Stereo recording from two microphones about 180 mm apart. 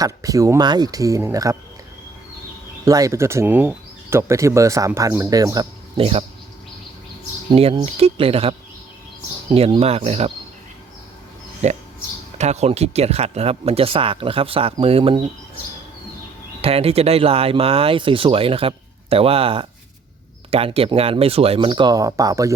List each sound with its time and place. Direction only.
0.0 s speech: 20° right (ahead or behind)
2.8 s speech: 20° right (ahead or behind)
6.0 s speech: 35° right (ahead or behind)
7.5 s speech: 30° right (ahead or behind)
11.6 s speech: 40° right (ahead or behind)
16.6 s speech: 35° right (ahead or behind)